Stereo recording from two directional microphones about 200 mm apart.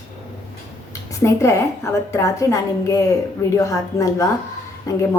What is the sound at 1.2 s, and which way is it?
A woman's voice, 15° left (ahead or behind).